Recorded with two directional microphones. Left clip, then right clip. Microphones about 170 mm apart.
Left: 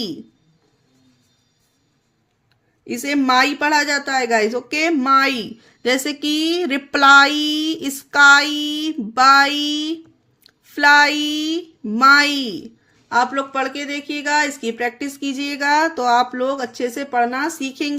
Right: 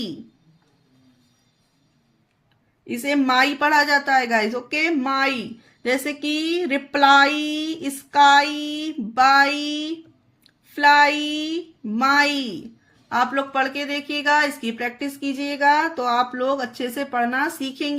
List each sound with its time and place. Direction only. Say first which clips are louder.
2.8 s a woman's voice: left 2 dB; 25° left (ahead or behind)
13.1 s speech: left 3 dB; 15° left (ahead or behind)